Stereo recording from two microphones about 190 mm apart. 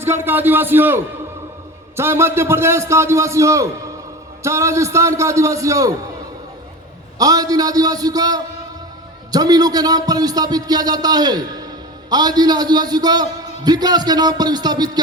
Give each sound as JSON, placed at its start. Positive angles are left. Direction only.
{"t": 0.0, "sound": "a man's voice", "side_deg": -10}
{"t": 7.2, "sound": "speech", "side_deg": -20}